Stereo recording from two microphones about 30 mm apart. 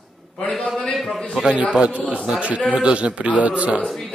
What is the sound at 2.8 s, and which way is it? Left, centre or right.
Speech, right.